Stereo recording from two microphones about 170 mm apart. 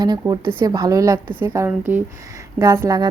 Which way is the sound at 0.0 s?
25° right (ahead or behind).